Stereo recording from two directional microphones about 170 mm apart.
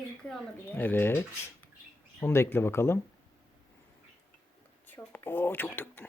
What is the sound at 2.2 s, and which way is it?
Speech, 15° left (ahead or behind).